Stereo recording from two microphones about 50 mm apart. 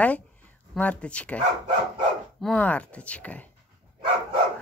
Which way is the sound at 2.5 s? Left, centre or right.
Left.